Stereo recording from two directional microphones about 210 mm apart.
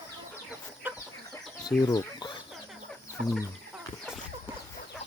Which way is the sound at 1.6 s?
20° left (ahead or behind).